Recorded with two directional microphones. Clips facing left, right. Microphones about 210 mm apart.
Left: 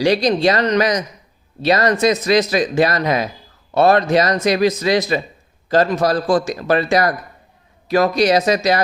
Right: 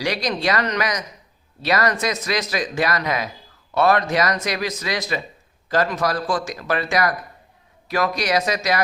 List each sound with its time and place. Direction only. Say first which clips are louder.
0.0 s a man's voice: left 8 dB; 25° left (ahead or behind)